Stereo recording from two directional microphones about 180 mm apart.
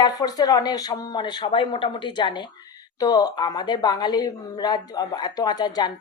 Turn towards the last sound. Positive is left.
turn(degrees=20)  # may be behind; listen again after turning